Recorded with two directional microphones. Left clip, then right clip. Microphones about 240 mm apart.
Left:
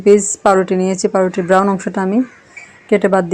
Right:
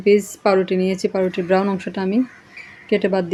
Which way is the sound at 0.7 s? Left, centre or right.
Left.